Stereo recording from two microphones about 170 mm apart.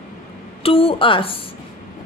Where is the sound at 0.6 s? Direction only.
35° left (ahead or behind).